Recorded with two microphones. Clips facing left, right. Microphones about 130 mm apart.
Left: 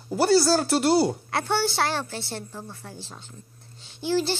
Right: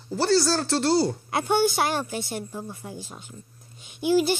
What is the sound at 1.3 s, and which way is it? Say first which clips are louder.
A child's voice: right 3 dB; 15° right (ahead or behind).